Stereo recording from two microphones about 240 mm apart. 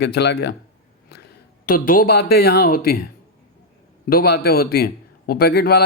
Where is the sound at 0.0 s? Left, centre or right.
Left.